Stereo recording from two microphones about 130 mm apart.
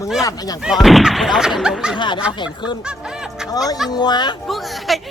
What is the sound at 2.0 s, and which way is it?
Speech, 35° left (ahead or behind).